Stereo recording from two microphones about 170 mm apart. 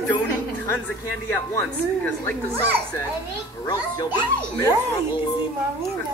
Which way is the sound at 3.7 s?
25° left (ahead or behind).